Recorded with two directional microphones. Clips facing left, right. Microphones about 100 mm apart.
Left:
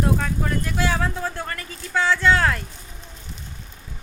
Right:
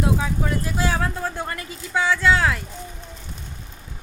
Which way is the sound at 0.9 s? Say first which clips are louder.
Even; 5° right (ahead or behind).